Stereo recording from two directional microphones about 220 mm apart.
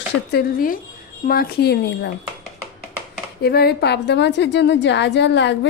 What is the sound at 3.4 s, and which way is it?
A woman's voice, 45° left (ahead or behind).